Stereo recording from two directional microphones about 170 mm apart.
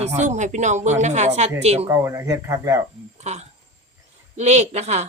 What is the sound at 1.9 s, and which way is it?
Speech, 15° right (ahead or behind).